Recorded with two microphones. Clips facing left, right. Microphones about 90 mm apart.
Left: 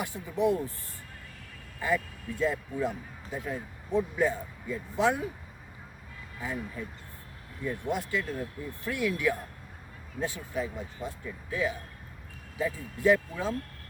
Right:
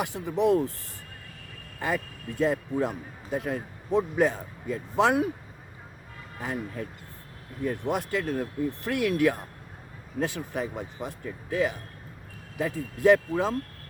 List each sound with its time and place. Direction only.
0.0 s speech: 75° right (ahead or behind)
1.8 s speech: 65° right (ahead or behind)
6.4 s speech: 55° right (ahead or behind)